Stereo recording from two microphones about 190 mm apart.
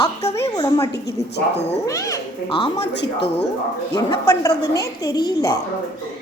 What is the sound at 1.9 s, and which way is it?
Speech, 15° left (ahead or behind).